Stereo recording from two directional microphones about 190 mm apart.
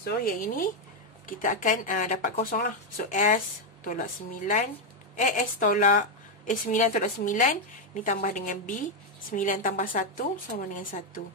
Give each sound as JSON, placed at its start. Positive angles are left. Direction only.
{"t": 0.0, "sound": "a woman's voice", "side_deg": 50}